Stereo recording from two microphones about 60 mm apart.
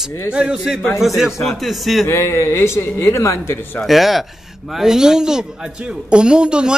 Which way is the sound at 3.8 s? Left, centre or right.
Centre.